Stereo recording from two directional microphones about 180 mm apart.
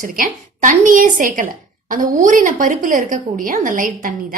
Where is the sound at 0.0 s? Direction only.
50° right (ahead or behind).